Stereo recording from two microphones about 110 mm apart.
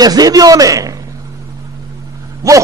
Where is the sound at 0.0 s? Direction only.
35° right (ahead or behind).